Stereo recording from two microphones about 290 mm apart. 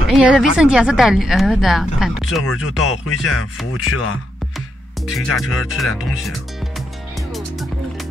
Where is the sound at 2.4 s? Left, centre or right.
Left.